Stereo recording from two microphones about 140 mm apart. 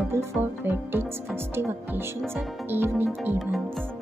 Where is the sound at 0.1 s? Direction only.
15° right (ahead or behind).